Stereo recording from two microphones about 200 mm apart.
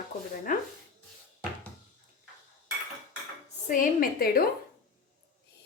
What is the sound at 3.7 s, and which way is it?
Speech, 45° left (ahead or behind).